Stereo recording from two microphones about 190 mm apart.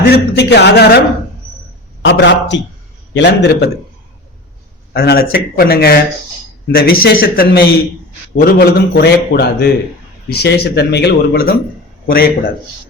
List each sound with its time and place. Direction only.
0.0 s a man's voice: 60° left (ahead or behind)
2.0 s speech: 70° left (ahead or behind)
4.9 s speech: 55° left (ahead or behind)